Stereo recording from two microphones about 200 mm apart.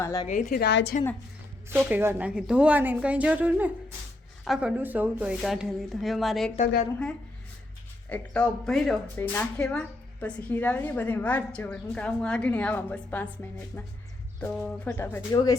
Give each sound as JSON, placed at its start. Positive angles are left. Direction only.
{"t": 0.0, "sound": "speech", "side_deg": 15}
{"t": 0.3, "sound": "a woman's voice", "side_deg": 40}
{"t": 0.6, "sound": "a woman's voice", "side_deg": 60}
{"t": 1.7, "sound": "a woman's voice", "side_deg": -10}
{"t": 8.1, "sound": "speech", "side_deg": 5}